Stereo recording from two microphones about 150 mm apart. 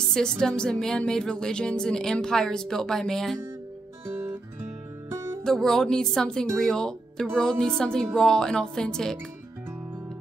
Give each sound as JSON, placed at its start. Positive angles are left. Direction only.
{"t": 0.1, "sound": "speech", "side_deg": 5}
{"t": 5.1, "sound": "music", "side_deg": -20}
{"t": 5.4, "sound": "speech", "side_deg": 5}